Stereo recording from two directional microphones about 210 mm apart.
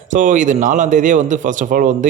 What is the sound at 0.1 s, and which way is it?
A man's voice, 40° right (ahead or behind).